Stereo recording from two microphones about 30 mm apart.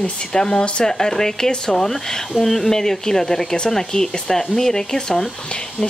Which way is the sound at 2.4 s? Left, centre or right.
Centre.